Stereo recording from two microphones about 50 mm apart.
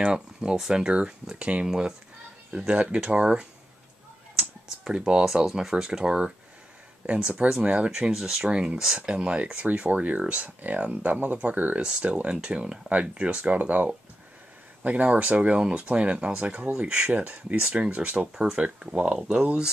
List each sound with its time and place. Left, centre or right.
0.0 s speech: centre
2.7 s speech: right
4.4 s computer keyboard: centre
5.2 s speech: centre; by 7.9 s right
7.9 s speech: centre
8.5 s speech: centre
11.8 s speech: right
18.3 s speech: centre